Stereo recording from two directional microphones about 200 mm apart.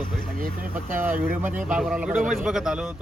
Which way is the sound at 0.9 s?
10° right (ahead or behind).